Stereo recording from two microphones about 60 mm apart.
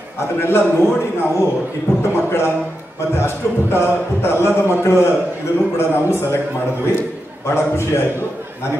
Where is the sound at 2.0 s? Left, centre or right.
Left.